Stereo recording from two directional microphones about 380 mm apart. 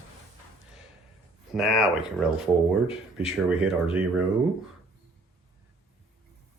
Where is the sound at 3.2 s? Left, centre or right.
Centre.